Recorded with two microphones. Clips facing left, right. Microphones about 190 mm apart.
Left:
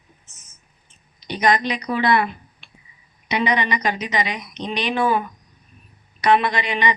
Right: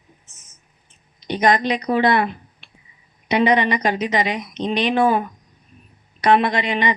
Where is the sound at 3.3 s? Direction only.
50° right (ahead or behind).